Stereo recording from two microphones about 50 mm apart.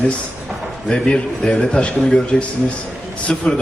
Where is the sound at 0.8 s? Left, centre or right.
Centre.